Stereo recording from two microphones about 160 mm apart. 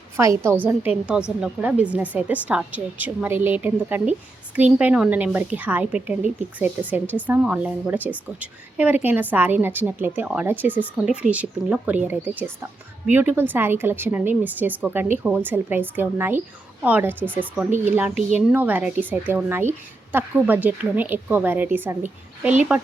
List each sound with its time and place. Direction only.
0.2 s a woman's voice: 15° right (ahead or behind)